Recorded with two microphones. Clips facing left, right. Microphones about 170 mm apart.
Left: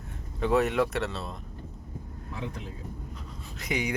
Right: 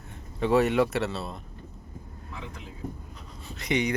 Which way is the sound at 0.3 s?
Centre (ahead or behind).